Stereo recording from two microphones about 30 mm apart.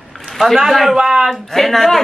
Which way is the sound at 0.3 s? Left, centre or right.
Centre.